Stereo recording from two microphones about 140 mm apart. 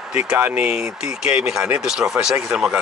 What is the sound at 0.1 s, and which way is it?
Speech, 10° right (ahead or behind).